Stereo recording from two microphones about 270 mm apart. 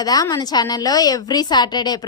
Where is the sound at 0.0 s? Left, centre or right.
Centre.